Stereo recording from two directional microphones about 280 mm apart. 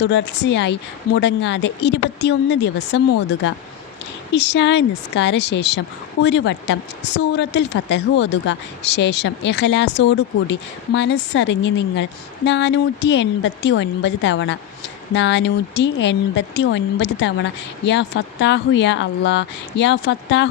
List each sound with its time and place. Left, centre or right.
0.0 s speech: left